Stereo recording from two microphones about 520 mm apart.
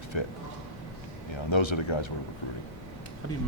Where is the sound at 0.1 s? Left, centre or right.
Left.